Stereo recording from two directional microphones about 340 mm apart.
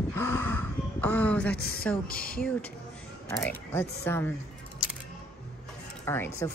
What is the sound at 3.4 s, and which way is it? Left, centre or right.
Speech, centre.